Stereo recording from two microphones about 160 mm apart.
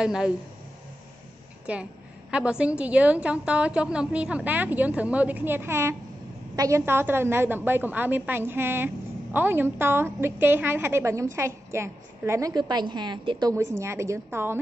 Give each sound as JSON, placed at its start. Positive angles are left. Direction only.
{"t": 0.0, "sound": "speech", "side_deg": -5}
{"t": 1.7, "sound": "a woman's voice", "side_deg": -10}